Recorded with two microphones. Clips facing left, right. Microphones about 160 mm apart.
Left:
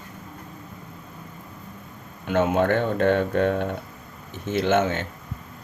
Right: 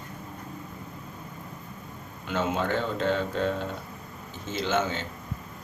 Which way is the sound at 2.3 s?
55° left (ahead or behind).